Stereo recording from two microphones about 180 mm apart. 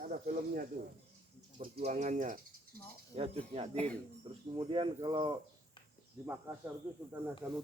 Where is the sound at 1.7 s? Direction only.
40° right (ahead or behind).